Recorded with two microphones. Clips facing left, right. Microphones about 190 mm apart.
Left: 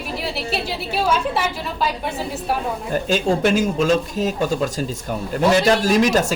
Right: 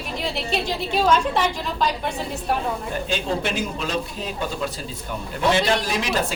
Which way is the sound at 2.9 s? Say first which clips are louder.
Left 9 dB; 45° left (ahead or behind).